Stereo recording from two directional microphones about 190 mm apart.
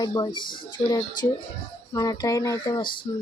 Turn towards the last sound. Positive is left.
turn(degrees=25)  # may be behind; listen again after turning